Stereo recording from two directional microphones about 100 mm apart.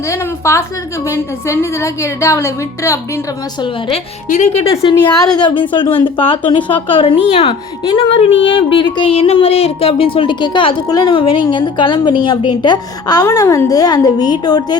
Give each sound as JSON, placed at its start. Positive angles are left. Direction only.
{"t": 0.1, "sound": "a woman's voice", "side_deg": 30}
{"t": 4.4, "sound": "a woman's voice", "side_deg": 85}
{"t": 9.1, "sound": "a woman's voice", "side_deg": 80}
{"t": 10.8, "sound": "a woman's voice", "side_deg": 40}
{"t": 11.1, "sound": "a woman's voice", "side_deg": 60}